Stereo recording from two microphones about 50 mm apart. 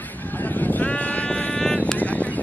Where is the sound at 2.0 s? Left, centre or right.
Left.